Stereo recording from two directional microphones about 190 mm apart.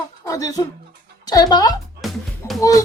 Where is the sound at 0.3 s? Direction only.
20° left (ahead or behind).